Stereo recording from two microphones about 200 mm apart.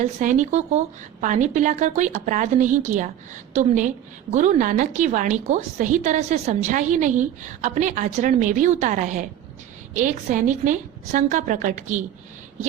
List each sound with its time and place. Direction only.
0.0 s a woman's voice: 40° right (ahead or behind)